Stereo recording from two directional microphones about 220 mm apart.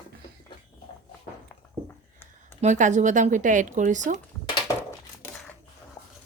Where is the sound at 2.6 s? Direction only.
35° right (ahead or behind).